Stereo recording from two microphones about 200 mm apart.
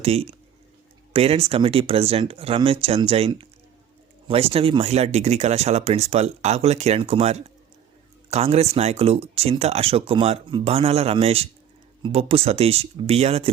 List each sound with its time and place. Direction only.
0.0 s speech: 30° right (ahead or behind)